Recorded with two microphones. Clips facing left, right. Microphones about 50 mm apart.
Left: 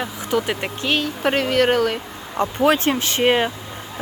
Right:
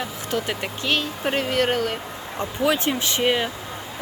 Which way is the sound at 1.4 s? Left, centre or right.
Left.